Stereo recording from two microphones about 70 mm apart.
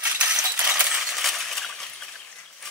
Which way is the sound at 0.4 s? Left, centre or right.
Right.